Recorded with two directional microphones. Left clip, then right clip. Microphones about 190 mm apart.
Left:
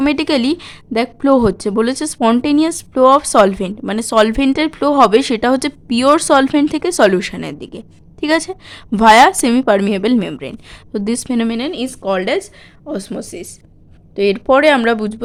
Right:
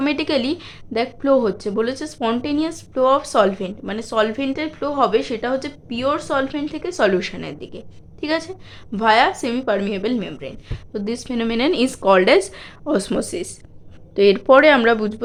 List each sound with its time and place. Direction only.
0.0 s a woman's voice: 40° left (ahead or behind)